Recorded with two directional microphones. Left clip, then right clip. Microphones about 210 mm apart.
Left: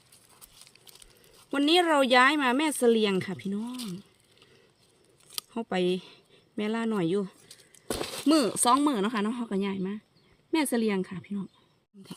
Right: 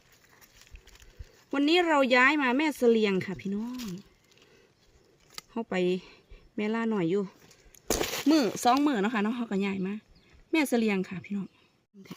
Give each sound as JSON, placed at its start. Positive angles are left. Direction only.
{"t": 1.5, "sound": "speech", "side_deg": 5}
{"t": 5.5, "sound": "a woman's voice", "side_deg": 5}
{"t": 7.9, "sound": "a sound", "side_deg": -50}
{"t": 8.3, "sound": "a woman's voice", "side_deg": 5}